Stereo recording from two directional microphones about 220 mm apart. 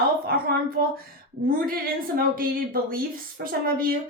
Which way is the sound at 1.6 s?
40° right (ahead or behind).